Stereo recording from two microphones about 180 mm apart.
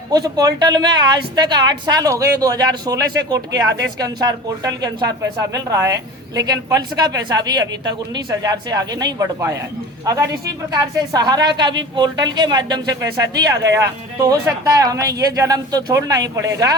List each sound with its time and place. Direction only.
0.1 s speech: 20° right (ahead or behind)
10.7 s speech: 25° right (ahead or behind)